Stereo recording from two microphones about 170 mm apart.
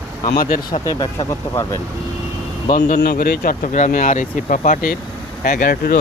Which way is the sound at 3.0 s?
65° left (ahead or behind).